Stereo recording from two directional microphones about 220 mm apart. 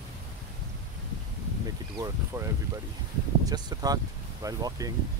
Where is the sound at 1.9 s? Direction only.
15° right (ahead or behind).